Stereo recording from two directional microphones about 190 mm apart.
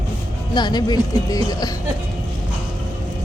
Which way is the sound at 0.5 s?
25° left (ahead or behind).